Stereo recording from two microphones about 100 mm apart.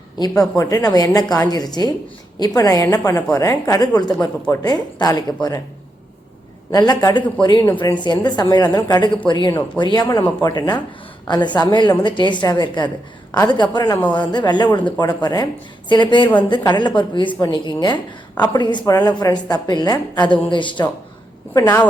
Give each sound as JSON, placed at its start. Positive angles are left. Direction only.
{"t": 0.2, "sound": "a woman's voice", "side_deg": 35}
{"t": 6.7, "sound": "a woman's voice", "side_deg": 40}
{"t": 18.9, "sound": "a woman's voice", "side_deg": 35}
{"t": 20.3, "sound": "a woman's voice", "side_deg": 55}